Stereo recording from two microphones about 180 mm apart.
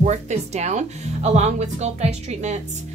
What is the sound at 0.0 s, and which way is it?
Speech, 40° right (ahead or behind).